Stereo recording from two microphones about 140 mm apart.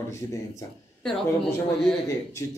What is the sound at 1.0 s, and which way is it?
Speech, 5° left (ahead or behind).